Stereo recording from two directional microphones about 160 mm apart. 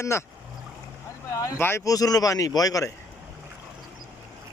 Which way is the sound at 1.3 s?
20° left (ahead or behind).